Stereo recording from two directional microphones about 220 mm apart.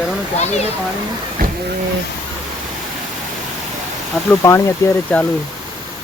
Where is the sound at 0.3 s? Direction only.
30° left (ahead or behind).